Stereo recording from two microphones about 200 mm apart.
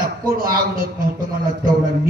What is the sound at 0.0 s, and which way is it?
A man's voice, 45° right (ahead or behind).